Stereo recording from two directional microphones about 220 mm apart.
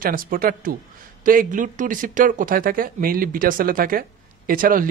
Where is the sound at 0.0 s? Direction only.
40° right (ahead or behind).